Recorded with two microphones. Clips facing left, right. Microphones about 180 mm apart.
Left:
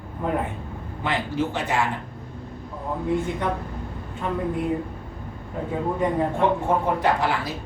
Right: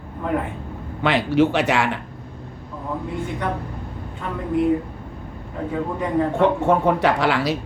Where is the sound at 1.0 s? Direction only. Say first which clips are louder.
Right 8 dB; 80° right.